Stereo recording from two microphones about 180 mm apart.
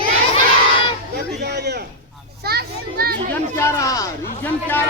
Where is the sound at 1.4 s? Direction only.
65° right (ahead or behind).